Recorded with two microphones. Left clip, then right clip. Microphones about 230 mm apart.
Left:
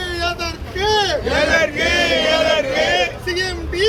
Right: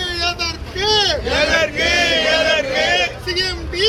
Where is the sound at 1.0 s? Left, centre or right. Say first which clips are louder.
Even; centre.